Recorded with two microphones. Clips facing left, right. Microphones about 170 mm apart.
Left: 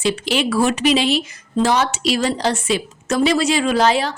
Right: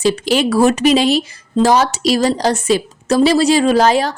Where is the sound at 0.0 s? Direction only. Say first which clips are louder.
Right 5 dB; 40° right (ahead or behind).